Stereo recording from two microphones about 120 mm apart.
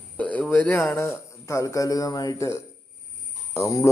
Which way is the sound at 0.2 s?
10° left (ahead or behind).